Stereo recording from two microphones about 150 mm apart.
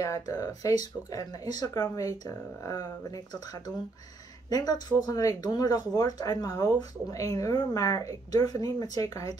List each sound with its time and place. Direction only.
0.0 s speech: 25° left (ahead or behind)
4.5 s speech: 25° left (ahead or behind)